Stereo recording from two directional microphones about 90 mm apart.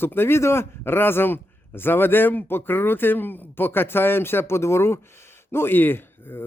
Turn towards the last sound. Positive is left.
turn(degrees=25)  # may be behind; listen again after turning